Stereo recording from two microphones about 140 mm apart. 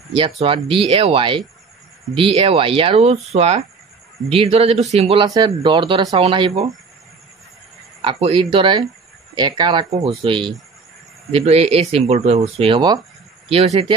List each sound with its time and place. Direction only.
0.4 s speech: 40° right (ahead or behind)
5.2 s speech: 30° right (ahead or behind)
8.0 s speech: 40° right (ahead or behind)
13.5 s speech: 45° right (ahead or behind)